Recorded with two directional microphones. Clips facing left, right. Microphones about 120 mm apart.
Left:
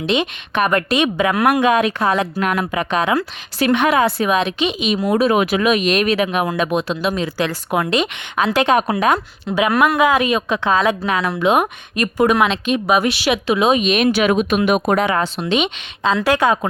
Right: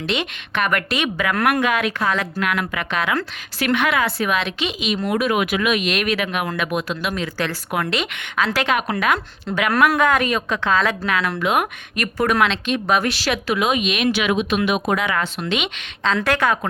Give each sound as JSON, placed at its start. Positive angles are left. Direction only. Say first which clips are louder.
{"t": 0.1, "sound": "speech", "louder": "left 6 dB", "side_deg": 15}
{"t": 2.9, "sound": "speech", "louder": "left 4 dB", "side_deg": 25}
{"t": 5.0, "sound": "speech", "louder": "left 5 dB", "side_deg": 30}
{"t": 8.7, "sound": "speech", "louder": "left 5 dB", "side_deg": 30}
{"t": 9.5, "sound": "speech", "louder": "left 2 dB", "side_deg": 5}
{"t": 15.1, "sound": "speech", "louder": "left 4 dB", "side_deg": 30}